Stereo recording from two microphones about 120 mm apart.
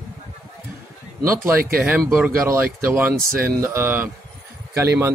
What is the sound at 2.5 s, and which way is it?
Speech, 20° right (ahead or behind).